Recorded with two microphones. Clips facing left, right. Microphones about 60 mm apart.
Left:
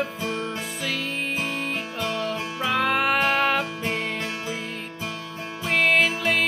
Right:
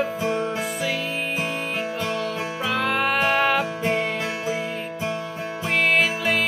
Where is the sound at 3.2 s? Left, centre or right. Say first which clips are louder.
Right 2 dB; centre.